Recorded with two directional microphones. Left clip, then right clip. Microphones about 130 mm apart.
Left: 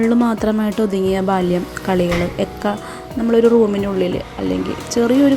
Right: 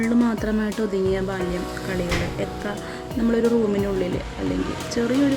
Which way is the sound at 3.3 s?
25° left (ahead or behind).